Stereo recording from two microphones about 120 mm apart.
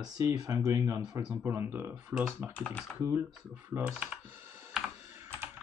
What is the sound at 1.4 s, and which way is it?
Speech, 20° right (ahead or behind).